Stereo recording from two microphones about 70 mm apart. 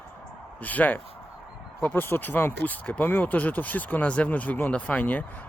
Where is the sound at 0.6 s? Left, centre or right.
Left.